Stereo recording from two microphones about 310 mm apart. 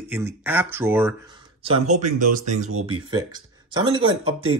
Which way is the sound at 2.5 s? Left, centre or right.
Right.